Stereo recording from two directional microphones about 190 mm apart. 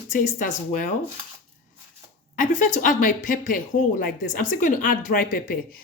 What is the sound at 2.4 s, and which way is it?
Speech, 40° left (ahead or behind).